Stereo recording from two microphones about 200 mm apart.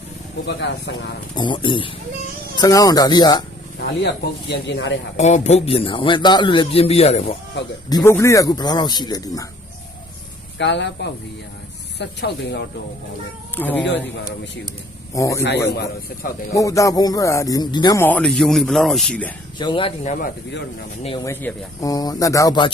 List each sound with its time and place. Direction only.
0.4 s speech: 60° left (ahead or behind)
1.4 s a man's voice: 25° left (ahead or behind)
3.8 s speech: 55° left (ahead or behind)
5.1 s a man's voice: 35° left (ahead or behind)
7.9 s a man's voice: 15° left (ahead or behind)
10.6 s speech: 60° left (ahead or behind)
13.6 s speech: 10° left (ahead or behind)
15.1 s speech: 15° left (ahead or behind)
16.6 s speech: 15° left (ahead or behind)
18.0 s speech: 5° left (ahead or behind)
19.5 s a man's voice: 25° left (ahead or behind)
20.1 s speech: 45° left (ahead or behind)
21.0 s a man's voice: 25° left (ahead or behind)
21.2 s speech: 15° left (ahead or behind)